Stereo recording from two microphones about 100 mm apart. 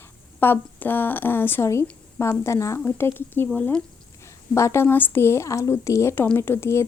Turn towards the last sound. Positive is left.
turn(degrees=25)  # may be behind; listen again after turning